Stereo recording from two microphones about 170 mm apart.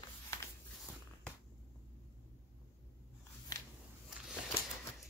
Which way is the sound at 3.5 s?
25° left (ahead or behind).